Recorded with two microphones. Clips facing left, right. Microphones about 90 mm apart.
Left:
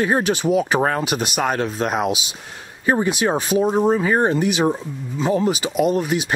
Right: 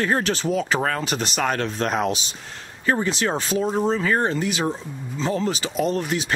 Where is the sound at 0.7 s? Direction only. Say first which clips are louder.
Left 4 dB; 25° left (ahead or behind).